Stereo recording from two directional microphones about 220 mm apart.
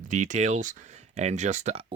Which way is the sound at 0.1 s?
35° right (ahead or behind).